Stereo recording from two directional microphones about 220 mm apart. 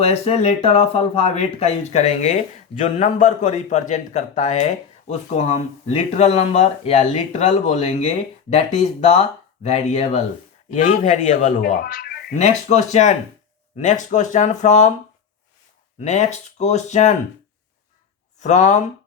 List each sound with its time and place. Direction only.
0.0 s speech: 30° left (ahead or behind)
11.8 s a sound: 45° left (ahead or behind)
12.4 s speech: 30° left (ahead or behind)
16.0 s speech: 30° left (ahead or behind)
18.3 s speech: 35° left (ahead or behind)